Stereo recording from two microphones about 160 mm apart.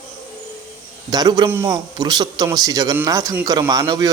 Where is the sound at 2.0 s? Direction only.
25° right (ahead or behind).